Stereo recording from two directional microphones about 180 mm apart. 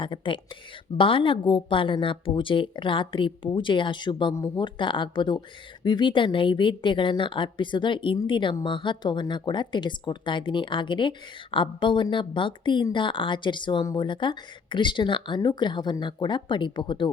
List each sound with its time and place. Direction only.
0.0 s a woman's voice: 25° left (ahead or behind)